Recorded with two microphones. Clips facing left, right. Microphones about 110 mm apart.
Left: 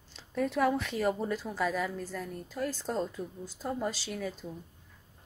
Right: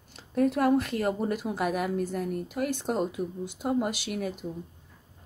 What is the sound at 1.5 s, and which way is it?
A woman's voice, 60° right (ahead or behind).